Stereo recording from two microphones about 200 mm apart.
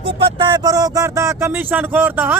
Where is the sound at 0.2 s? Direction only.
20° right (ahead or behind).